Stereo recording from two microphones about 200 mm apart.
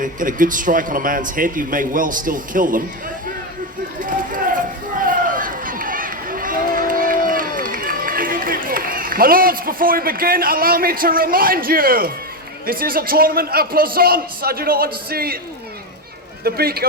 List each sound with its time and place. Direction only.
0.0 s a man's voice: 40° right (ahead or behind)
4.0 s run: 40° right (ahead or behind)
12.6 s a man's voice: 45° right (ahead or behind)
16.4 s a man's voice: 50° right (ahead or behind)